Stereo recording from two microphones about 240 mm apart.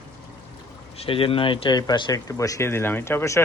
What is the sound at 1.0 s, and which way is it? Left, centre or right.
Speech, left.